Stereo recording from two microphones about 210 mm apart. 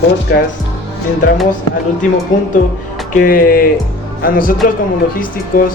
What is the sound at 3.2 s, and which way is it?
Speech, 45° left (ahead or behind).